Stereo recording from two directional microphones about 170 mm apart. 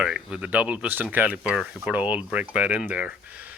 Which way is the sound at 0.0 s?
5° right (ahead or behind).